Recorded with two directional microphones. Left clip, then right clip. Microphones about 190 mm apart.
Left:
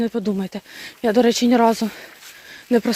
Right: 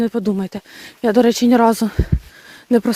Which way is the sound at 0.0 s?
40° right (ahead or behind).